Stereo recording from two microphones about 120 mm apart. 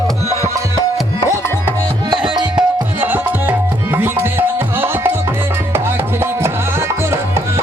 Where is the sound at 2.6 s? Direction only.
15° right (ahead or behind).